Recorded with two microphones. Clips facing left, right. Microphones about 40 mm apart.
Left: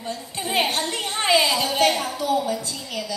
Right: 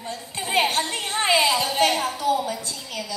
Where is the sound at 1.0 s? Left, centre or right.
Right.